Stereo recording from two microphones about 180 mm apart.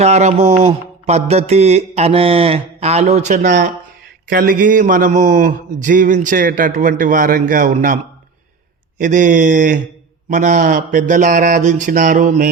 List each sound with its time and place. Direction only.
0.0 s mantra: 40° right (ahead or behind)
4.3 s speech: 50° right (ahead or behind)
9.0 s speech: 45° right (ahead or behind)